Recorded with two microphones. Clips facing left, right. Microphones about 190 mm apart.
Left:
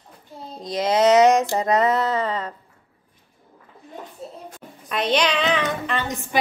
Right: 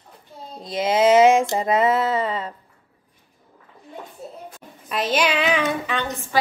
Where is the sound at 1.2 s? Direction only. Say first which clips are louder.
Right 1 dB; centre (ahead or behind).